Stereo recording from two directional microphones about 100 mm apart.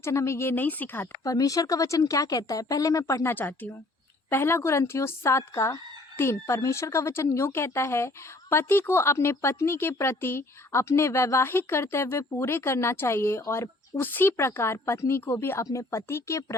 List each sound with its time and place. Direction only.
0.0 s fowl: 25° left (ahead or behind)
1.2 s speech: 35° left (ahead or behind); by 3.7 s 20° left (ahead or behind)
4.3 s fowl: 25° left (ahead or behind)